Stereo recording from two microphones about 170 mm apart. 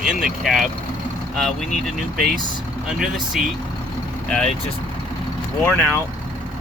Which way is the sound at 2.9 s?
5° right (ahead or behind).